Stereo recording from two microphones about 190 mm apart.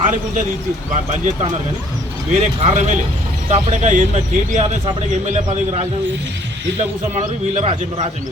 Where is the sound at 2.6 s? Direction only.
35° right (ahead or behind).